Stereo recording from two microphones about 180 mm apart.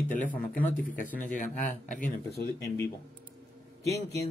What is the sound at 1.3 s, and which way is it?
Speech, 45° left (ahead or behind).